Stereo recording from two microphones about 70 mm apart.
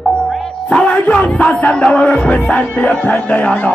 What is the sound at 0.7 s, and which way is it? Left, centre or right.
Music, centre.